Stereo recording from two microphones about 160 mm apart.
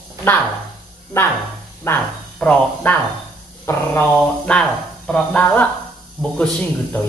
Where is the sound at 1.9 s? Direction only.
15° left (ahead or behind).